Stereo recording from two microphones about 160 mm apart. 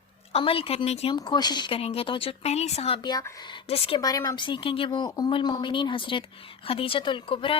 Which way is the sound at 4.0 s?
20° left (ahead or behind).